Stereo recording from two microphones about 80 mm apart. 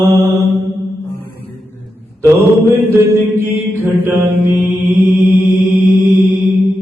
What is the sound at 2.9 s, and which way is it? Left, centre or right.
Mantra, right.